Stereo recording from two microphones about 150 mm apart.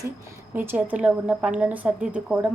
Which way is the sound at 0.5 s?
15° right (ahead or behind).